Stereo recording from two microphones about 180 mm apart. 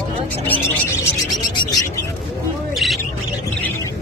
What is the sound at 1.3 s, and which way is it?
Speech, 25° left (ahead or behind).